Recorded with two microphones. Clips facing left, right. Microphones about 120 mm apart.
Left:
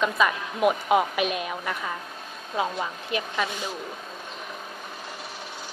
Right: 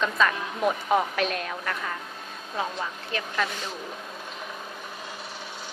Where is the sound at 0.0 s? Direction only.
10° left (ahead or behind).